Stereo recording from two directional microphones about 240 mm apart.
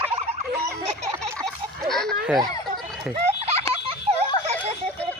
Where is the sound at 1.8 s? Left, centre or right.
Centre.